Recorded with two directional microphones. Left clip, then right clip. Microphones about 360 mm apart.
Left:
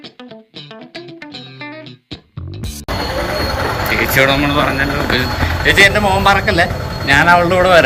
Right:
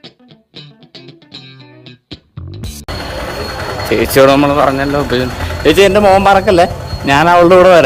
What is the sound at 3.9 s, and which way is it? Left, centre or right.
Speech, right.